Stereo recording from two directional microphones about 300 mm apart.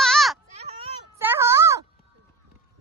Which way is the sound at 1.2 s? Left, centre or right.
Centre.